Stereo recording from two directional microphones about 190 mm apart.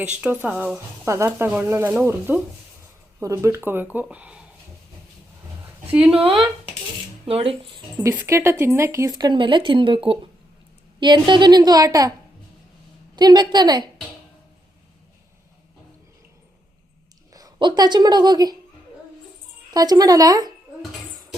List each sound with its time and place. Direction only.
0.2 s speech: 10° right (ahead or behind)
1.0 s speech: 15° right (ahead or behind)
6.2 s speech: 25° right (ahead or behind)
13.1 s speech: 20° right (ahead or behind)
17.3 s a woman's voice: 20° right (ahead or behind)
19.7 s speech: 20° right (ahead or behind)